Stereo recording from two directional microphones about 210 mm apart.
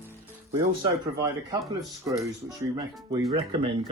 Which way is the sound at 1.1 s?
15° right (ahead or behind).